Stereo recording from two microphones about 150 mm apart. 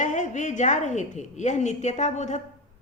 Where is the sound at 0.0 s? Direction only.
55° left (ahead or behind).